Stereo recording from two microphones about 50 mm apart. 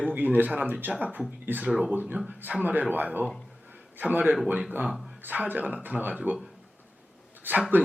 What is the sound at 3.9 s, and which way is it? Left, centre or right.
Speech, right.